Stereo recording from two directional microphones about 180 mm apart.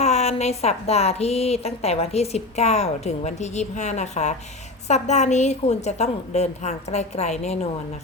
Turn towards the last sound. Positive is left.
turn(degrees=40)  # may be behind; listen again after turning